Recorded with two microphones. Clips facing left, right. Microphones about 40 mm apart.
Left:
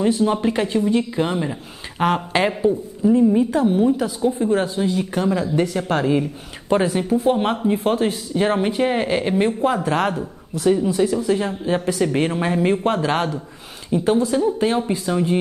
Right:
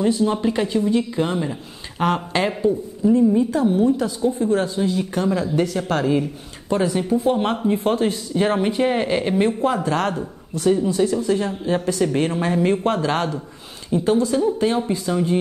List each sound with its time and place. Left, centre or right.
0.0 s speech: centre